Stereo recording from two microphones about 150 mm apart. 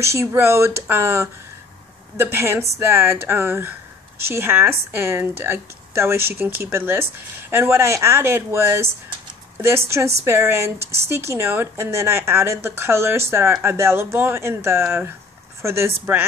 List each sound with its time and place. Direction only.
0.0 s speech: 20° right (ahead or behind)
9.8 s speech: 20° right (ahead or behind)